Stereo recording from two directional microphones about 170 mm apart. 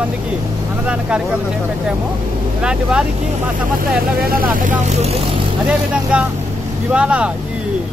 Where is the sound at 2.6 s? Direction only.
5° right (ahead or behind).